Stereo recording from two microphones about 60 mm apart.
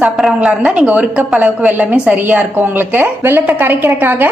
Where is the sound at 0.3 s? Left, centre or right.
Centre.